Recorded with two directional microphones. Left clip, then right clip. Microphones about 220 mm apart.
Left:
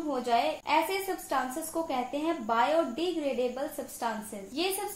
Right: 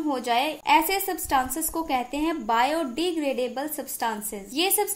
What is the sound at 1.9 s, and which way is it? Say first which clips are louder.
Speech: right 6 dB; 45° right (ahead or behind).